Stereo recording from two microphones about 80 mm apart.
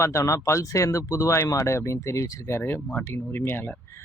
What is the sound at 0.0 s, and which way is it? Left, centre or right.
Speech, left.